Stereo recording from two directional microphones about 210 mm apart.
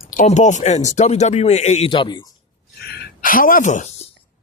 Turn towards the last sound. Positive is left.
turn(degrees=35)  # may be behind; listen again after turning